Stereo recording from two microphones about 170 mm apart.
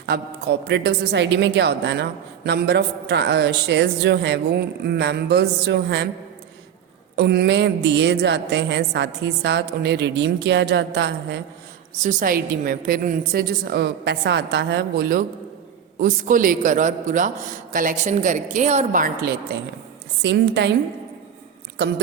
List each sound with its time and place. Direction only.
0.0 s a woman's voice: 70° right (ahead or behind)
7.2 s a woman's voice: 75° right (ahead or behind)
11.9 s a woman's voice: 50° right (ahead or behind); by 15.2 s 65° right (ahead or behind)
16.0 s a man's voice: 50° right (ahead or behind); by 19.6 s 70° right (ahead or behind)
20.2 s a woman's voice: 80° right
21.8 s speech: 90° right